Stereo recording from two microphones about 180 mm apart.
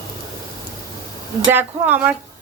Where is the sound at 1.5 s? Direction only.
10° right (ahead or behind).